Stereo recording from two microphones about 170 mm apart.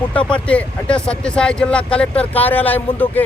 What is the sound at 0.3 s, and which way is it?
Speech, 5° left (ahead or behind).